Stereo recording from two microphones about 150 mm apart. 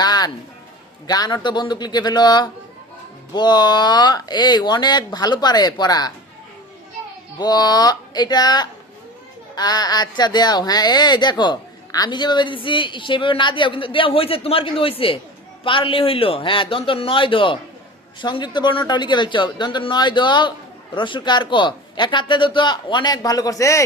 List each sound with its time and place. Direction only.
0.0 s music: 25° left (ahead or behind)
1.0 s speech: 25° left (ahead or behind)
7.3 s speech: 25° left (ahead or behind)